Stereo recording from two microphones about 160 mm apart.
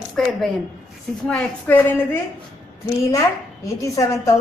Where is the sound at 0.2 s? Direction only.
5° left (ahead or behind).